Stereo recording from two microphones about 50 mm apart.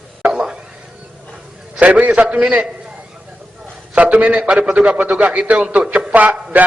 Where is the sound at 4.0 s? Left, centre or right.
Right.